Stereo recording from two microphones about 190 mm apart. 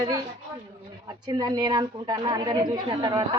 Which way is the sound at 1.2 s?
20° right (ahead or behind).